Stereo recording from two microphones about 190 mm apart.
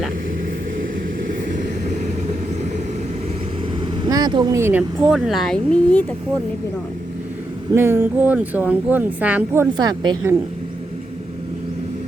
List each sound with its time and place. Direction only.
4.0 s speech: 20° right (ahead or behind); by 6.1 s 5° left (ahead or behind)
7.7 s speech: 15° right (ahead or behind)
9.7 s speech: 25° right (ahead or behind)